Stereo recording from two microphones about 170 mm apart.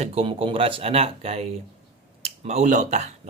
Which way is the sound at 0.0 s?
35° right (ahead or behind).